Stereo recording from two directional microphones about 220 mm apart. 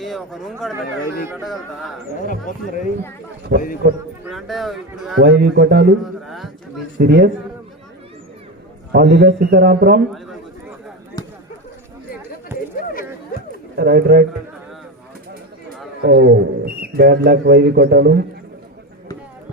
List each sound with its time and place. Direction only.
0.0 s speech: centre (ahead or behind)
2.1 s speech: 35° left (ahead or behind)
3.5 s a man's voice: 50° right (ahead or behind)
4.3 s speech: centre (ahead or behind)
5.1 s a man's voice: 50° right (ahead or behind)
6.2 s speech: centre (ahead or behind)
7.0 s a man's voice: 50° right (ahead or behind)
8.9 s a man's voice: 50° right (ahead or behind)
12.5 s a sound: 10° right (ahead or behind)
13.7 s a man's voice: 45° right (ahead or behind)
16.0 s a man's voice: 45° right (ahead or behind)